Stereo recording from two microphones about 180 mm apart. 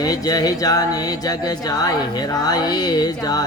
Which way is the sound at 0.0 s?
20° left (ahead or behind).